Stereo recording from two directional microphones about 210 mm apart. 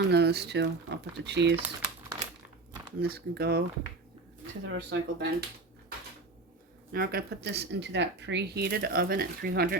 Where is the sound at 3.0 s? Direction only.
45° right (ahead or behind).